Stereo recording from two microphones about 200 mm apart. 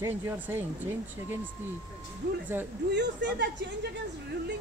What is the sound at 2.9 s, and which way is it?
Speech, 60° right (ahead or behind).